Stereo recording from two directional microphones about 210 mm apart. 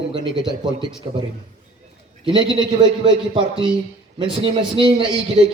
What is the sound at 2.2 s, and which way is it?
A man's voice, 20° right (ahead or behind).